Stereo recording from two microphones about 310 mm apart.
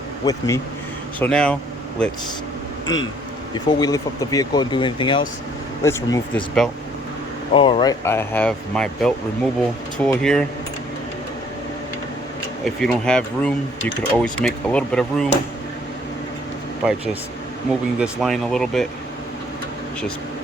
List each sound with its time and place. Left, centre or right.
0.3 s speech: centre
2.8 s speech: left
3.5 s speech: centre
7.5 s speech: centre
12.6 s speech: centre
18.0 s speech: centre